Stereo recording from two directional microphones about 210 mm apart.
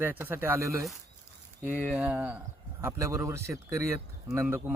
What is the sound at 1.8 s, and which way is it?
Speech, centre (ahead or behind).